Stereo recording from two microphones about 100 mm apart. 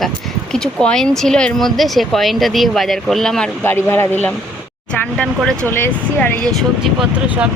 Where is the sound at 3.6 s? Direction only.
25° left (ahead or behind).